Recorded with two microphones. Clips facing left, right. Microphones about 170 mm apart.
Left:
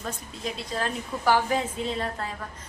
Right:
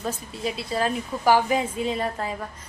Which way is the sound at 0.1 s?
5° right (ahead or behind).